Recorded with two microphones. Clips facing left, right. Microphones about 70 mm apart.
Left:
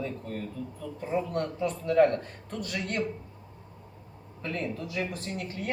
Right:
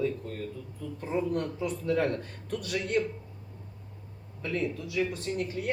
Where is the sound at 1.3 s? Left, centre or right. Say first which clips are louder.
Left 1 dB; left.